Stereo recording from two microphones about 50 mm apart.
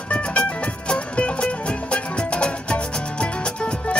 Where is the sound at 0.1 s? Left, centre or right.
Left.